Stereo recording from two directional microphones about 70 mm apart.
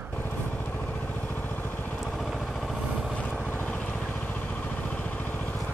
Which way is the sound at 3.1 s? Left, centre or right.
Left.